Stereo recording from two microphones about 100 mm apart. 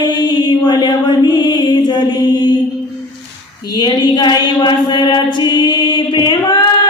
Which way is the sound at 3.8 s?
45° left (ahead or behind).